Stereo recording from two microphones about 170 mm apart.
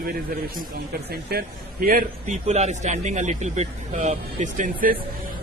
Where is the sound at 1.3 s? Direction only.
65° right (ahead or behind).